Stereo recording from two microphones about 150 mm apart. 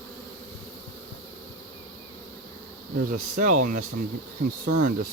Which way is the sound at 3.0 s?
60° right (ahead or behind).